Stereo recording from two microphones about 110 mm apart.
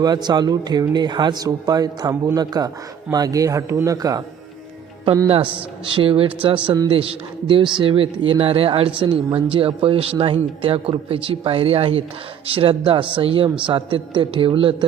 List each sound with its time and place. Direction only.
0.0 s speech: 40° right (ahead or behind)
5.8 s a man's voice: 55° right (ahead or behind)